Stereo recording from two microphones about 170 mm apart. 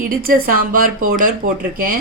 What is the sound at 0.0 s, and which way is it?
A woman's voice, 60° right (ahead or behind).